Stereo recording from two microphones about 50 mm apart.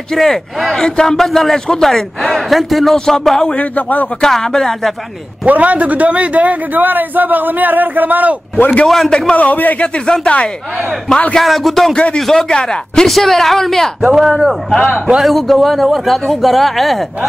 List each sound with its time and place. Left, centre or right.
0.1 s speech: centre
0.7 s a man's voice: centre
3.5 s speech: left
4.2 s a man's voice: centre
5.4 s a man's voice: right
8.8 s speech: centre
9.3 s speech: left
9.9 s a man's voice: centre
11.3 s speech: centre
11.9 s speech: left
12.2 s a man's voice: centre
14.1 s speech: centre
14.9 s a man's voice: centre
15.2 s speech: centre